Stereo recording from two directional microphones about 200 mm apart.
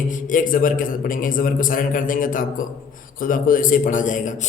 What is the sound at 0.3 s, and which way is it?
A man's voice, 40° left (ahead or behind).